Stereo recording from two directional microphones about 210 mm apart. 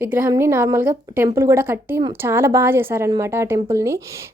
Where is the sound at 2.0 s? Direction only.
20° right (ahead or behind).